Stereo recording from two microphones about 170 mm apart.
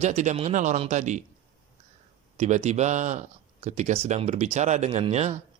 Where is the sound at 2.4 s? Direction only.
40° right (ahead or behind).